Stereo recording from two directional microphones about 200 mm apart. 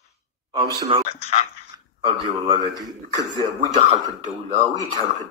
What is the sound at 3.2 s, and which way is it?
Speech, 15° left (ahead or behind).